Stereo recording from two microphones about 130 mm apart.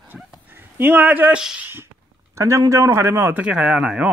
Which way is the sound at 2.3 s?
25° right (ahead or behind).